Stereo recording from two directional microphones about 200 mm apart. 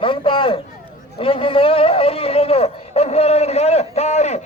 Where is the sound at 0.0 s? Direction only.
25° left (ahead or behind).